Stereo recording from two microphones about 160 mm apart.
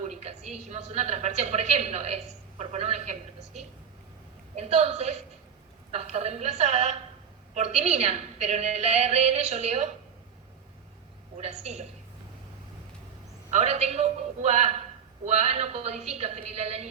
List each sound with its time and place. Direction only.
0.0 s a woman's voice: 45° right (ahead or behind)
11.3 s a woman's voice: 45° right (ahead or behind)
13.5 s a woman's voice: 45° right (ahead or behind)